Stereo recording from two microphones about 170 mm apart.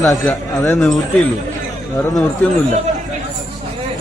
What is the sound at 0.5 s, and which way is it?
Speech, 20° left (ahead or behind).